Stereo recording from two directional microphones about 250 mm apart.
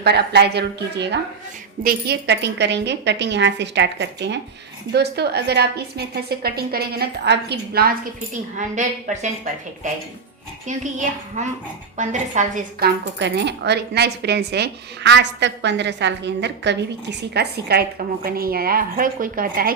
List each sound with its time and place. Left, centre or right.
0.0 s a woman's voice: right
13.1 s speech: right